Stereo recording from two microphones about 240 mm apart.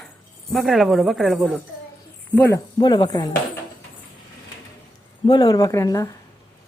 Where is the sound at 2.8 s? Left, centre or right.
Centre.